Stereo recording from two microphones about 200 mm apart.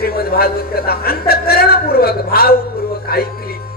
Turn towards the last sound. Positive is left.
turn(degrees=50)  # may be behind; listen again after turning